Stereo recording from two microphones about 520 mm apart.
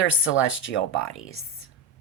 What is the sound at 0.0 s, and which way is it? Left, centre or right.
Speech, left.